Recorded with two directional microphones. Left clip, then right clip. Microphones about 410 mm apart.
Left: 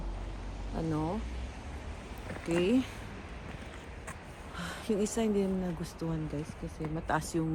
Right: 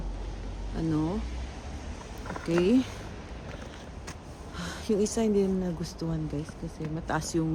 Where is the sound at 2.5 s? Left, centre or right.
Centre.